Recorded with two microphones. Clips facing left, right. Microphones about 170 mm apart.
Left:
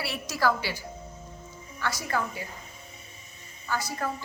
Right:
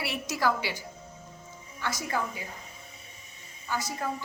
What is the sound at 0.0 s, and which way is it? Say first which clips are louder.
Speech: left 1 dB; 20° right (ahead or behind).